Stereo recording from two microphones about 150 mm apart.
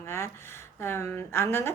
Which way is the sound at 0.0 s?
15° left (ahead or behind).